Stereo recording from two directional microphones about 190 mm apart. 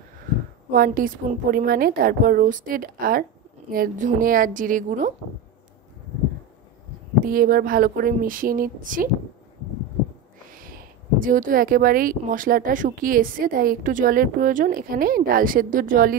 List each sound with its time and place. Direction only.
0.7 s speech: 50° right (ahead or behind)
7.2 s speech: 50° right (ahead or behind)
10.5 s speech: 50° right (ahead or behind)